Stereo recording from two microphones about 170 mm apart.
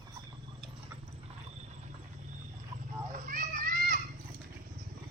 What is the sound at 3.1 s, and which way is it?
Children playing, 55° right (ahead or behind).